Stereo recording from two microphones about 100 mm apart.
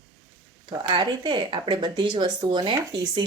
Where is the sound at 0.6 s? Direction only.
50° right (ahead or behind).